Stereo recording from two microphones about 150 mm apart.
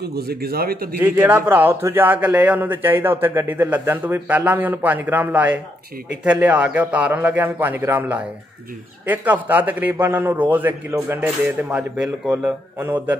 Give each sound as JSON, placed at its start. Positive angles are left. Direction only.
{"t": 0.0, "sound": "speech", "side_deg": -90}
{"t": 1.0, "sound": "a man's voice", "side_deg": -15}